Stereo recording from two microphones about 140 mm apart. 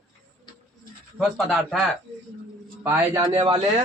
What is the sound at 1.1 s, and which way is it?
Speech, centre (ahead or behind).